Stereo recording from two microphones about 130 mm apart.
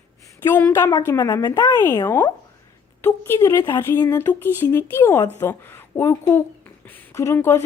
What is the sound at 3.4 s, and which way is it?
Speech, 30° left (ahead or behind).